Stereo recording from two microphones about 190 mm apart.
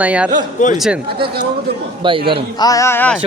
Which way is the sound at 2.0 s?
25° right (ahead or behind).